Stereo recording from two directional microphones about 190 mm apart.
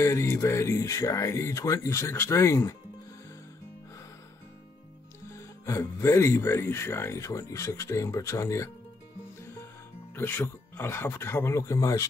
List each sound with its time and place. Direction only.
0.0 s speech: 15° left (ahead or behind)
5.3 s speech: 15° left (ahead or behind)
10.1 s speech: 10° left (ahead or behind)